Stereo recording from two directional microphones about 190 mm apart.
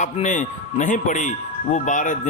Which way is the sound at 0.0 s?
40° left (ahead or behind).